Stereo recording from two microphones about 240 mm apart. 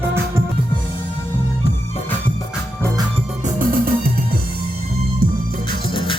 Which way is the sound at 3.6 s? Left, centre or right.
Right.